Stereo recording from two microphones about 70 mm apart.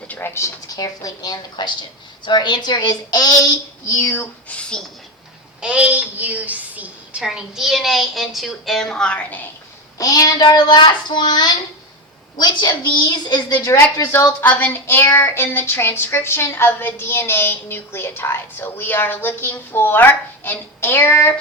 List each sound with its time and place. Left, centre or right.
0.2 s speech: left
0.7 s a woman's voice: left
4.1 s a woman's voice: left
5.5 s a woman's voice: centre
7.2 s a woman's voice: centre
10.0 s a child's voice: left
14.5 s a woman's voice: left